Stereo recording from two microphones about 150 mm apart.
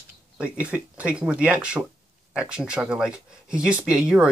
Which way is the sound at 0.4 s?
10° right (ahead or behind).